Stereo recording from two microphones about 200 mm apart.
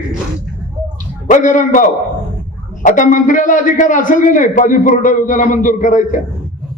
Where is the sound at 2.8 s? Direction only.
40° left (ahead or behind).